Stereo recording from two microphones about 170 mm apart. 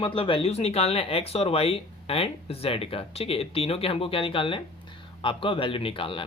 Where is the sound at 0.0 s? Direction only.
30° left (ahead or behind).